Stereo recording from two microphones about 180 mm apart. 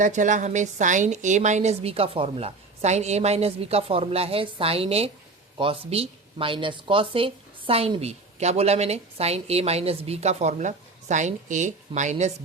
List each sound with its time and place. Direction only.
0.0 s a woman's voice: 45° right (ahead or behind)